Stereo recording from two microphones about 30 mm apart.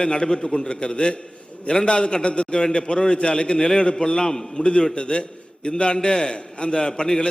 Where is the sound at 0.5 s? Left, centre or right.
Left.